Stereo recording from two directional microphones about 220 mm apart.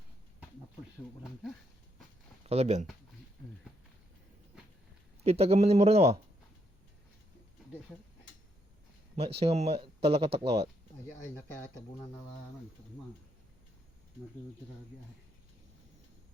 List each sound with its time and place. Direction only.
2.5 s speech: 30° right (ahead or behind)
5.2 s speech: 30° right (ahead or behind)
9.4 s speech: 30° right (ahead or behind)
11.3 s speech: 10° left (ahead or behind)